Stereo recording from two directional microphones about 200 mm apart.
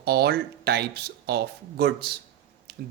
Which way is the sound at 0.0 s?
55° right (ahead or behind).